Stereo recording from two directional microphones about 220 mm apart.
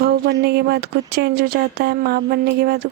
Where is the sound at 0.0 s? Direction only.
45° right (ahead or behind).